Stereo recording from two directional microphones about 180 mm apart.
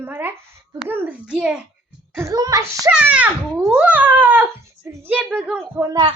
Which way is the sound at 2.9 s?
5° right (ahead or behind).